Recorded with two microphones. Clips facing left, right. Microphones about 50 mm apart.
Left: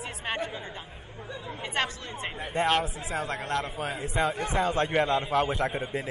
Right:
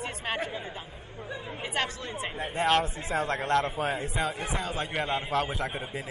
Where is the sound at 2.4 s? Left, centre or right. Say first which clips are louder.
Even; centre.